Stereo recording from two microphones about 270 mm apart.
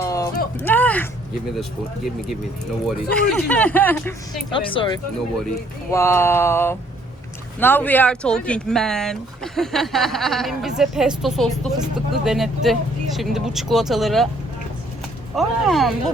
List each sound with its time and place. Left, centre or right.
0.0 s a sound: centre
2.8 s speech: centre
4.5 s speech: centre
5.9 s a sound: centre
7.6 s speech: centre
15.4 s speech: centre